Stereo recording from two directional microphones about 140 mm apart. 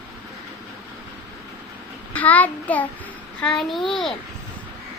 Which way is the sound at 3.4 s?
5° left (ahead or behind).